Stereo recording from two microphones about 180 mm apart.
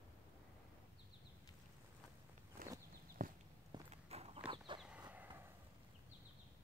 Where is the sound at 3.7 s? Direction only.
35° right (ahead or behind).